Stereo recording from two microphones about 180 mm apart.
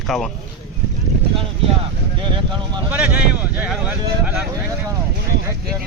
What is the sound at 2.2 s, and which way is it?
Vehicle, 25° right (ahead or behind).